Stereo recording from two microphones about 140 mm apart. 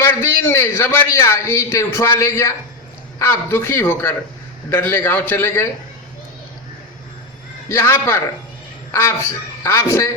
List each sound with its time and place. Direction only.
0.0 s a man's voice: 15° left (ahead or behind)
7.7 s a man's voice: 15° left (ahead or behind)